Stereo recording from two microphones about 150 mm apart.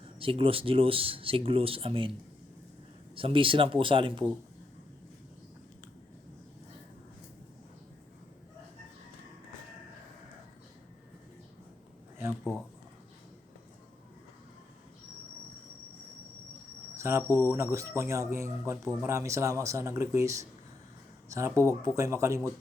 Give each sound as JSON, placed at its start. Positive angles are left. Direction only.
{"t": 0.2, "sound": "speech", "side_deg": -35}
{"t": 3.2, "sound": "speech", "side_deg": -35}
{"t": 16.9, "sound": "speech", "side_deg": -20}